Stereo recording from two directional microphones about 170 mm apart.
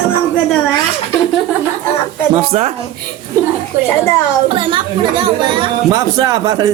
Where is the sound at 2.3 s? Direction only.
40° right (ahead or behind).